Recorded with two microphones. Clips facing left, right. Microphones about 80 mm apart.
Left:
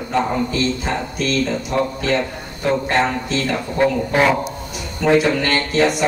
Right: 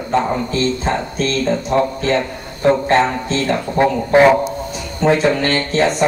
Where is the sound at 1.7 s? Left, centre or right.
Right.